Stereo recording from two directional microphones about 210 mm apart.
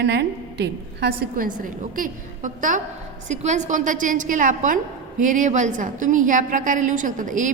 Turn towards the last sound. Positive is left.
turn(degrees=-40)  # may be behind; listen again after turning